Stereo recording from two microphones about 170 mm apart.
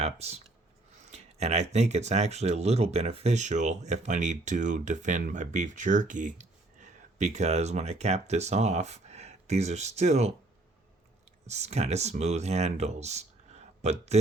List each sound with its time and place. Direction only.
0.0 s speech: 40° right (ahead or behind)
1.1 s a sound: 40° right (ahead or behind)
1.7 s speech: 40° right (ahead or behind)
11.4 s speech: 40° right (ahead or behind)